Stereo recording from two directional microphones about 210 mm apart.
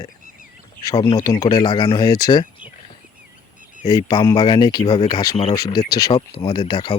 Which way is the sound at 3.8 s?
20° left (ahead or behind).